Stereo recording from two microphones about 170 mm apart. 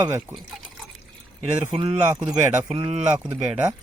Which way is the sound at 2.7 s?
35° right (ahead or behind).